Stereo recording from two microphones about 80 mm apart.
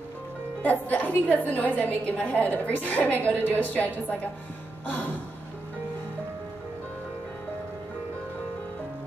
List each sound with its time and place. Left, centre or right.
0.6 s a woman's voice: centre